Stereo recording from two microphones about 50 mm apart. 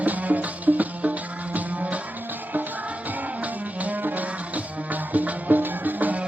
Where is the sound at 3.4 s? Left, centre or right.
Right.